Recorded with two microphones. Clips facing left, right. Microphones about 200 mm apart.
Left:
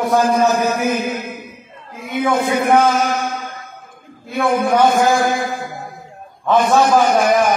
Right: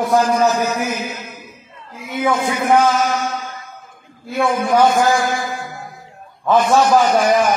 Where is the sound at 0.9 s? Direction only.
55° left (ahead or behind).